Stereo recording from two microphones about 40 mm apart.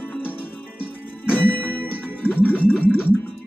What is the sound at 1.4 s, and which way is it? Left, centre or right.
Music, left.